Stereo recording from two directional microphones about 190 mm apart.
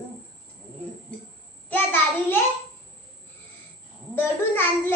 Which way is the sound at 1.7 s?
10° left (ahead or behind).